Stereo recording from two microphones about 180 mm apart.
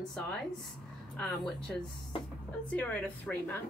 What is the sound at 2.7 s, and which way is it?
Speech, 10° left (ahead or behind).